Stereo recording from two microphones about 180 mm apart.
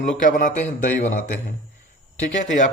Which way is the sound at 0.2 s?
45° left (ahead or behind).